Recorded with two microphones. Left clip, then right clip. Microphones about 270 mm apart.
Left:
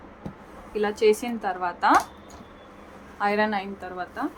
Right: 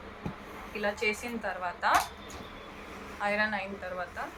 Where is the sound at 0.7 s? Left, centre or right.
Left.